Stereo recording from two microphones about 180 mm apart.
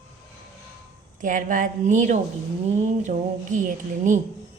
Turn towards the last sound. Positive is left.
turn(degrees=-45)  # may be behind; listen again after turning